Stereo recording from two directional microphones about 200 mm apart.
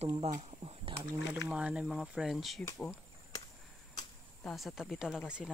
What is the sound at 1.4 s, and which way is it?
Speech, 5° right (ahead or behind).